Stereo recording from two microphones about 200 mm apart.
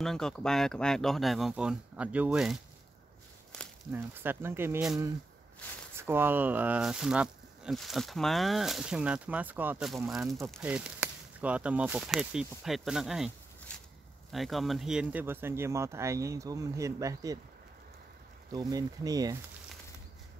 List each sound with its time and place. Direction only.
0.0 s speech: 5° left (ahead or behind)
3.9 s speech: 10° right (ahead or behind)
5.9 s speech: 10° right (ahead or behind)
14.3 s speech: centre (ahead or behind); by 17.4 s 15° right (ahead or behind)
18.5 s speech: 20° right (ahead or behind)